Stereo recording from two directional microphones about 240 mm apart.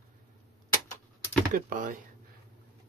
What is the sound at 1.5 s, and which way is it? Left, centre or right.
Speech, right.